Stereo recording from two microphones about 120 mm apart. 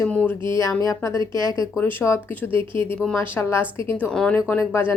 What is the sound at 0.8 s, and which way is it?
A woman's voice, 25° left (ahead or behind).